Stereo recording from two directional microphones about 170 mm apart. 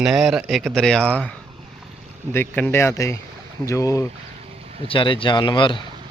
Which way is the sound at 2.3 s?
10° left (ahead or behind).